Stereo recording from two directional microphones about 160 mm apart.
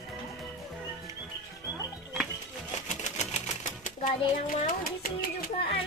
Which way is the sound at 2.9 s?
45° left (ahead or behind).